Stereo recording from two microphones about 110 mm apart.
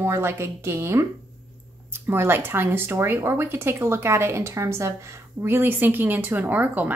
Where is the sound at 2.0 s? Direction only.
20° right (ahead or behind).